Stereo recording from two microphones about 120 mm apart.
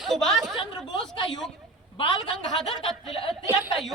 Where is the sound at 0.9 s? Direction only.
45° left (ahead or behind).